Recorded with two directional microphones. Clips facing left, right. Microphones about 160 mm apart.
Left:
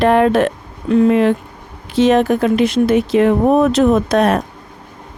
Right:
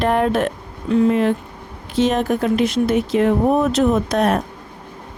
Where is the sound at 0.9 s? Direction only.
75° left (ahead or behind).